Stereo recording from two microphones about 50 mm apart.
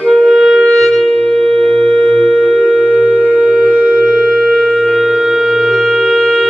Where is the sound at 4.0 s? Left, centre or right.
Centre.